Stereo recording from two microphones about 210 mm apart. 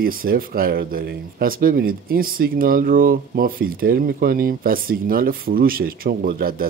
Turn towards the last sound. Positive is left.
turn(degrees=-45)  # may be behind; listen again after turning